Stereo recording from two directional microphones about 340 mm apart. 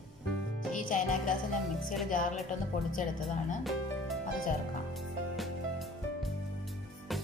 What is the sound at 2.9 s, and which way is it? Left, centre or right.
Speech, left.